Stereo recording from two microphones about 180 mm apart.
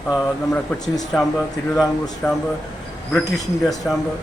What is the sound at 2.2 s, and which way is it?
Speech, 10° left (ahead or behind).